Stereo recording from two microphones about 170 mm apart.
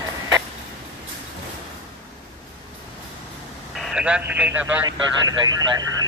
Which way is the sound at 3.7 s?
5° right (ahead or behind).